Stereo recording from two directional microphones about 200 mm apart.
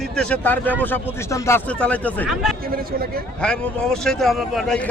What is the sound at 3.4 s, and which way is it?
Speech, 5° left (ahead or behind).